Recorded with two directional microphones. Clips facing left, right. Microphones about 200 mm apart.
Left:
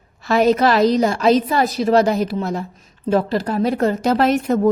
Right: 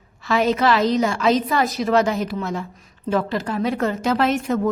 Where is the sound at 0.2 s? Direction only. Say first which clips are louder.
Left 4 dB; 40° left (ahead or behind).